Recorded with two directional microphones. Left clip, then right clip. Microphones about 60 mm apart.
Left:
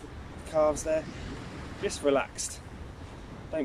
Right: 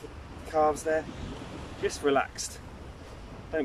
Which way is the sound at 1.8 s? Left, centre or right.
Left.